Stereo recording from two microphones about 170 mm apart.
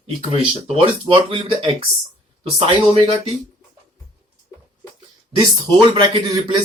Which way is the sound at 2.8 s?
35° left (ahead or behind).